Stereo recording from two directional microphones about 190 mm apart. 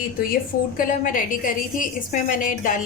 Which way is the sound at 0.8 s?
45° left (ahead or behind).